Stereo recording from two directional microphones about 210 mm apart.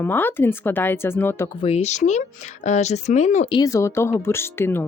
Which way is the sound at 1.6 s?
30° left (ahead or behind).